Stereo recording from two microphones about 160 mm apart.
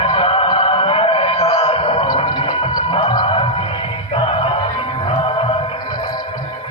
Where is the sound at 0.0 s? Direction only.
35° left (ahead or behind).